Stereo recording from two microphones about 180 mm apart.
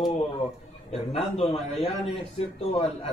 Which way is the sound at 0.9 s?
35° left (ahead or behind).